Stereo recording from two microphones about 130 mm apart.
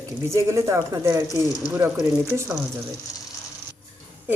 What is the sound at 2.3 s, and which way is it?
Speech, 20° right (ahead or behind).